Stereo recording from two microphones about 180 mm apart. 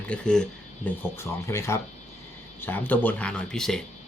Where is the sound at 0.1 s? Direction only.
5° left (ahead or behind).